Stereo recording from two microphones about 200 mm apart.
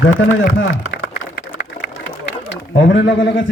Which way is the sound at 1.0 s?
90° left.